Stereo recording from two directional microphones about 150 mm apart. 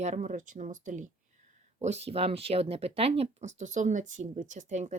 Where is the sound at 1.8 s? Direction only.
45° right (ahead or behind).